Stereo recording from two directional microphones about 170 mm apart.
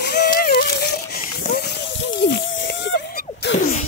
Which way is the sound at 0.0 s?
70° left (ahead or behind).